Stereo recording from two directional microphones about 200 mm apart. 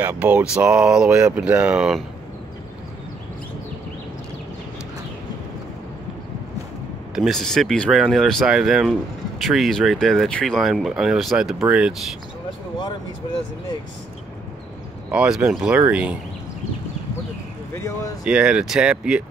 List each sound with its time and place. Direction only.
0.0 s speech: 10° right (ahead or behind)
7.2 s speech: centre (ahead or behind)
15.0 s speech: 5° right (ahead or behind)
17.7 s speech: 15° left (ahead or behind)
18.2 s speech: 5° right (ahead or behind)